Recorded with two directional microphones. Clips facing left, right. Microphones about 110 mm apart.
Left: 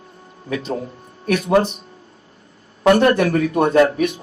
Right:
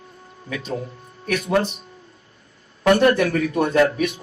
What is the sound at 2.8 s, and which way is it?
Speech, 35° left (ahead or behind).